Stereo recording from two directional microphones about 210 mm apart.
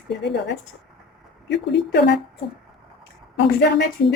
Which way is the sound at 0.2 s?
55° left (ahead or behind).